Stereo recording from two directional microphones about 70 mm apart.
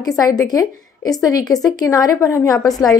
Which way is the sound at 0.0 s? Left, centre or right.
Left.